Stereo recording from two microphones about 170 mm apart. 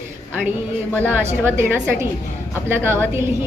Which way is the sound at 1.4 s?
15° right (ahead or behind).